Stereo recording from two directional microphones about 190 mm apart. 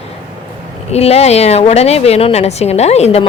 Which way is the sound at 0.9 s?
35° left (ahead or behind).